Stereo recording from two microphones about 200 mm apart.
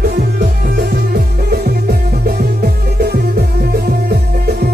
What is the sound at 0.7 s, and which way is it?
Music, 50° right (ahead or behind).